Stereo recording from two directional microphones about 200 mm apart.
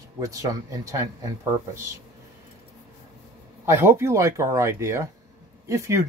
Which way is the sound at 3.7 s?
15° right (ahead or behind).